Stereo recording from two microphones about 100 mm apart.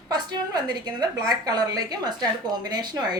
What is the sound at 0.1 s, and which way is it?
A woman's voice, 45° right (ahead or behind).